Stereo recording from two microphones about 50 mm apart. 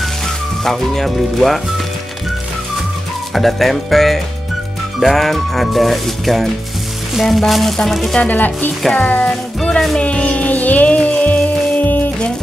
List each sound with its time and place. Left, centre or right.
0.7 s speech: centre
3.3 s speech: centre
8.2 s speech: left
8.9 s music: left